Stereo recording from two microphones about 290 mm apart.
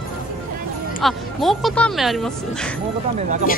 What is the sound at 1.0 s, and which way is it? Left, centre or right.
Speech, centre.